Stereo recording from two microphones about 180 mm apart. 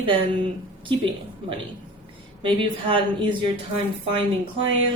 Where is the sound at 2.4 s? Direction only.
30° right (ahead or behind).